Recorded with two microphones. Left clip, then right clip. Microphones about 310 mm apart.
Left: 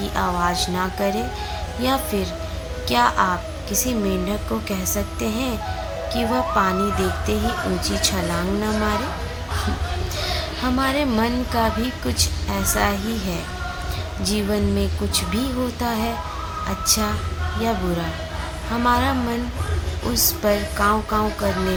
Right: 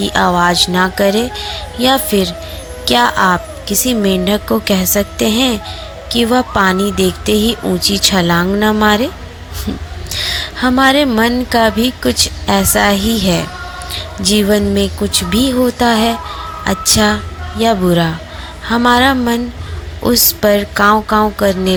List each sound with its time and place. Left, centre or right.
0.0 s a woman's voice: right
10.2 s a woman's voice: right